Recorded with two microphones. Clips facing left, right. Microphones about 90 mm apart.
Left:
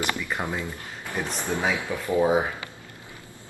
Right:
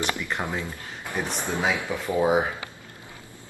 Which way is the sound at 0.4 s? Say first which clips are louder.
Even; centre (ahead or behind).